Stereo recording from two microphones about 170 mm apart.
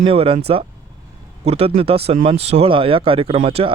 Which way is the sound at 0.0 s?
35° right (ahead or behind).